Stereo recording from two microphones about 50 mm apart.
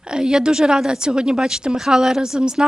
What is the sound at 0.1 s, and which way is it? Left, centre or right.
A woman's voice, centre.